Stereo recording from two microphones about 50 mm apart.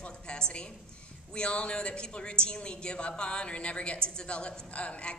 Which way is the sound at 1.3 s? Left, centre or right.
Left.